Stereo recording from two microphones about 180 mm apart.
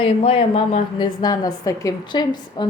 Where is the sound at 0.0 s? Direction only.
30° left (ahead or behind).